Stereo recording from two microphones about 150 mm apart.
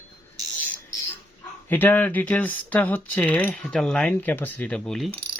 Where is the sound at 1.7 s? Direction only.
10° left (ahead or behind).